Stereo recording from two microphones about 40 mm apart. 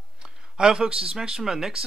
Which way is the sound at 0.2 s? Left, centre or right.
Right.